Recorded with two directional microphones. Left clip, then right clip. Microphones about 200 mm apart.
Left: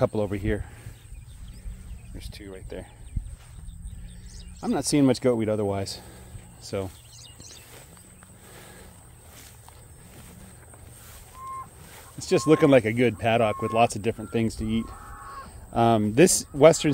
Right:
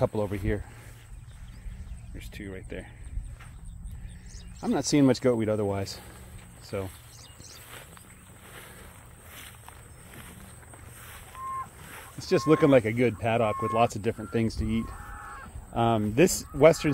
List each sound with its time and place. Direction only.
0.0 s speech: 20° left (ahead or behind)
2.1 s speech: 5° left (ahead or behind)
4.6 s speech: centre (ahead or behind)
6.6 s speech: 20° left (ahead or behind)
7.2 s a sound: 65° left (ahead or behind)
12.2 s speech: 10° left (ahead or behind)
15.0 s crow: 55° right (ahead or behind)
15.4 s speech: 25° left (ahead or behind)